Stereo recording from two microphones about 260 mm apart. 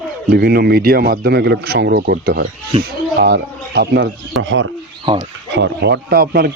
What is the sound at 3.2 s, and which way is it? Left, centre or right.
Speech, right.